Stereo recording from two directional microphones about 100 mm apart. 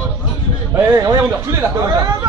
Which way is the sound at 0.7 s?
30° right (ahead or behind).